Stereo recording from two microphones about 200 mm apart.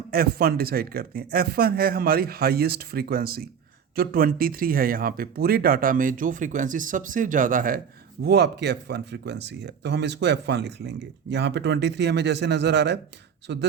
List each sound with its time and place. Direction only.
0.1 s speech: 50° right (ahead or behind)
8.2 s speech: 55° right (ahead or behind)